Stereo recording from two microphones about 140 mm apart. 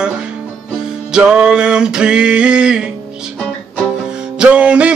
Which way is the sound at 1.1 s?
5° right (ahead or behind).